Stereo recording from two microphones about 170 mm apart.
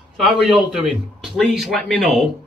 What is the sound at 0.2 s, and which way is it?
Speech, centre (ahead or behind).